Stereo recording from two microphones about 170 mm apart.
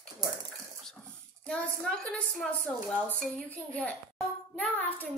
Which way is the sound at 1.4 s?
5° left (ahead or behind).